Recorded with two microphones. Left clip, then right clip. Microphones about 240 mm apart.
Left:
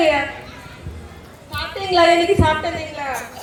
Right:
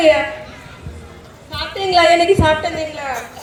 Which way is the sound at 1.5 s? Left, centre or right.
Right.